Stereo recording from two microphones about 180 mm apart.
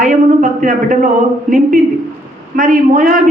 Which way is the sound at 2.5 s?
45° right (ahead or behind).